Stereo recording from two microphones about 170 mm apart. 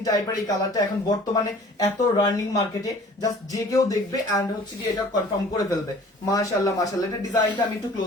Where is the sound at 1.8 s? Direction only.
20° left (ahead or behind).